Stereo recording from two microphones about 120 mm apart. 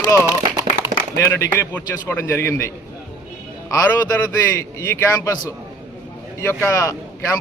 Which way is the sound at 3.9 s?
20° left (ahead or behind).